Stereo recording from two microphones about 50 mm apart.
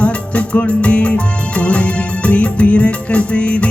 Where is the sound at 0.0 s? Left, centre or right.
Left.